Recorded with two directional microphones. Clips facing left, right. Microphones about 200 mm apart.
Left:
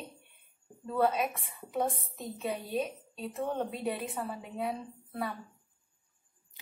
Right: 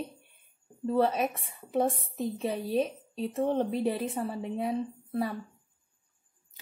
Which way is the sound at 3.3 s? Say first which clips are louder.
Right 6 dB; 30° right (ahead or behind).